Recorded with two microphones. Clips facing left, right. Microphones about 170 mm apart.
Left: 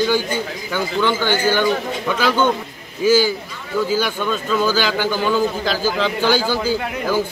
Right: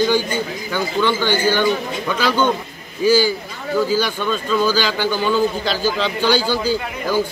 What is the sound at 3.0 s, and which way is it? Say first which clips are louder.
A man's voice: even; 10° left (ahead or behind).